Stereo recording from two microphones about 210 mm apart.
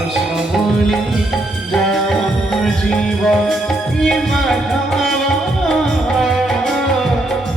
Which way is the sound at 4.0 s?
Centre (ahead or behind).